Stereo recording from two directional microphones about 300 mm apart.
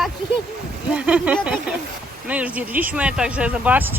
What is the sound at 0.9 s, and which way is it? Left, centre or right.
Speech, centre.